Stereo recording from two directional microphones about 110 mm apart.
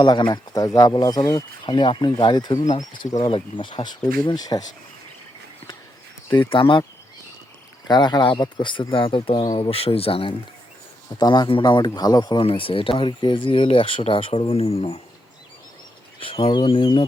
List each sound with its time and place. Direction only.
0.0 s speech: 40° left (ahead or behind)
1.6 s speech: 45° left (ahead or behind)
3.2 s speech: 50° left (ahead or behind)
6.3 s speech: 50° left (ahead or behind)
7.9 s speech: 40° left (ahead or behind); by 10.3 s 60° left (ahead or behind)
11.1 s speech: 40° left (ahead or behind)
12.4 s speech: 55° left (ahead or behind)
16.2 s speech: 55° left (ahead or behind)